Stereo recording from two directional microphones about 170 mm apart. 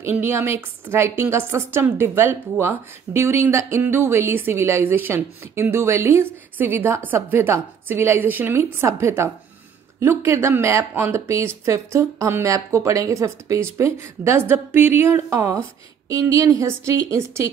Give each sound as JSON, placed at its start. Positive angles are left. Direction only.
{"t": 0.0, "sound": "speech", "side_deg": -15}